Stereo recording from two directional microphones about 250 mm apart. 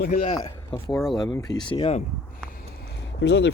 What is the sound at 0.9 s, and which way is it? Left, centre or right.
Speech, centre.